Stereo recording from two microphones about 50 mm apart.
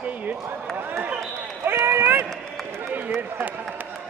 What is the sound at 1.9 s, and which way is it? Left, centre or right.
Run, right.